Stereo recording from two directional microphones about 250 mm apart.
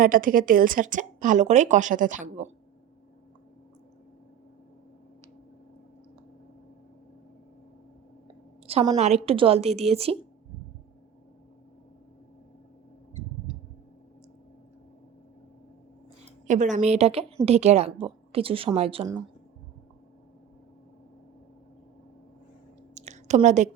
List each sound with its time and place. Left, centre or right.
0.0 s a woman's voice: right
8.6 s a woman's voice: right
16.5 s a woman's voice: right
23.0 s a sound: right